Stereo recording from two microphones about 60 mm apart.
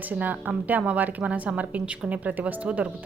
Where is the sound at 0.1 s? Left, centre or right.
Right.